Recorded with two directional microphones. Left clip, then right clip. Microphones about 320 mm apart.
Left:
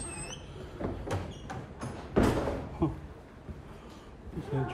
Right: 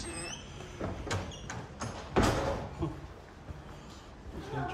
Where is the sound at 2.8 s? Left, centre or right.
Centre.